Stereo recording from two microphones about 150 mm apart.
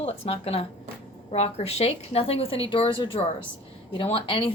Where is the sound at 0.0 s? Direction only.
40° left (ahead or behind).